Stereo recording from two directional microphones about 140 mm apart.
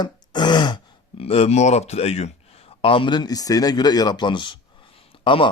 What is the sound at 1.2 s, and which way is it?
Speech, 45° left (ahead or behind).